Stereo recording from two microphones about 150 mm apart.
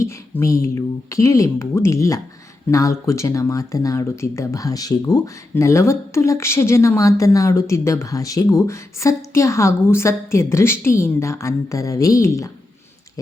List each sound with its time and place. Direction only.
0.0 s speech: 20° left (ahead or behind)